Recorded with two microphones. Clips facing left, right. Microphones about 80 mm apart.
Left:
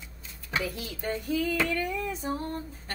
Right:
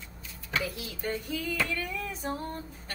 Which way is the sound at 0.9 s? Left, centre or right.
Left.